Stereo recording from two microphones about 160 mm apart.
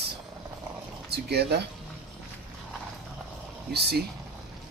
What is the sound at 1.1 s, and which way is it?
Speech, 90° right.